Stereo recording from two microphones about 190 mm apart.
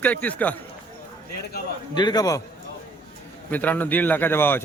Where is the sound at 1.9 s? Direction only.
20° left (ahead or behind).